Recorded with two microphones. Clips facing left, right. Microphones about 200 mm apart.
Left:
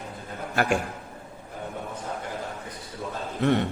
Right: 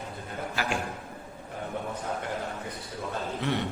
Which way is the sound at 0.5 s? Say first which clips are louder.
Left 8 dB; 55° left (ahead or behind).